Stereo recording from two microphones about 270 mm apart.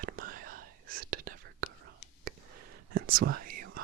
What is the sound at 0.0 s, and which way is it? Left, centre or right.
Whispering, right.